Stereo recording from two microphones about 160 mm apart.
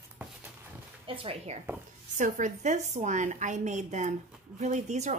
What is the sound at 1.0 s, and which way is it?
Speech, 35° right (ahead or behind).